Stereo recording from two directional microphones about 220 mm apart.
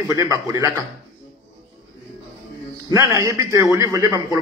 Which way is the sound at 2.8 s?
15° right (ahead or behind).